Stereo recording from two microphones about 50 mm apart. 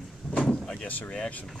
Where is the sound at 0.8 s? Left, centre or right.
Left.